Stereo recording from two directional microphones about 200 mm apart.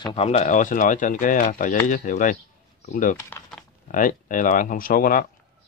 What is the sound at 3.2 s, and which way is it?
Speech, 15° left (ahead or behind).